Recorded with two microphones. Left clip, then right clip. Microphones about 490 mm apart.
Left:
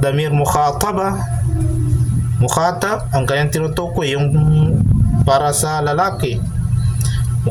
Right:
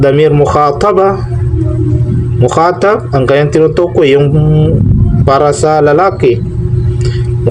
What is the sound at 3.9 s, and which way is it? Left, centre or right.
Speech, left.